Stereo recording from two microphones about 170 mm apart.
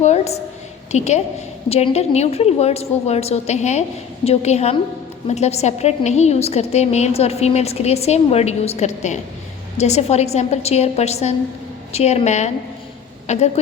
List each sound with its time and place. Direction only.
0.0 s a woman's voice: 40° left (ahead or behind)